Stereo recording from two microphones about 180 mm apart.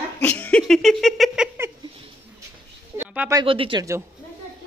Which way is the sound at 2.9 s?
10° right (ahead or behind).